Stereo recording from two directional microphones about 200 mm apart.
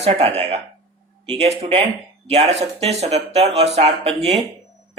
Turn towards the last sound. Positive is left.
turn(degrees=-35)  # may be behind; listen again after turning